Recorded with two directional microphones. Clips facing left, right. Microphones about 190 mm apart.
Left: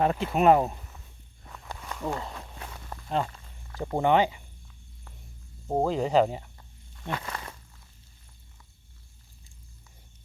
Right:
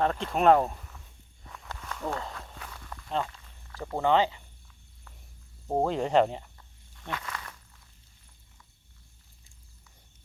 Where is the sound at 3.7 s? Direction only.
20° left (ahead or behind).